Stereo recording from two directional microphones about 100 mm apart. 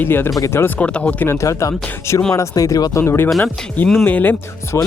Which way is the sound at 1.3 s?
30° left (ahead or behind).